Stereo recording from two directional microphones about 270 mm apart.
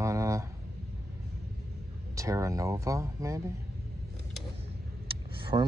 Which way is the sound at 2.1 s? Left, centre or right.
Centre.